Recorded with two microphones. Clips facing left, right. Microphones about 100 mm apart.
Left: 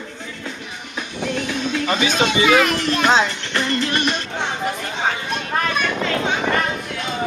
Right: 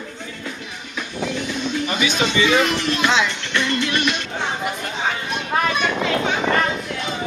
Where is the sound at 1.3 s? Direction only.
60° left (ahead or behind).